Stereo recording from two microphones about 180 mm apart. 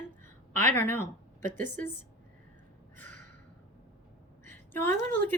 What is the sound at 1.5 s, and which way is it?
Speech, 45° right (ahead or behind).